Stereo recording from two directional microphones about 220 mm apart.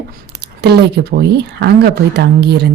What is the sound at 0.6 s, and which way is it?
Speech, 50° right (ahead or behind).